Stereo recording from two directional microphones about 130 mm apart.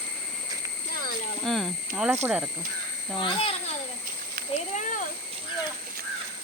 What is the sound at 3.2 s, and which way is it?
Speech, 45° left (ahead or behind).